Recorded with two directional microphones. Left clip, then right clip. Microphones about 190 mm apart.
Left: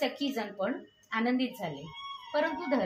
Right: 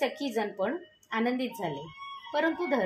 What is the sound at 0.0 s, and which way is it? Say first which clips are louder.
A woman's voice: right 2 dB; 35° right (ahead or behind).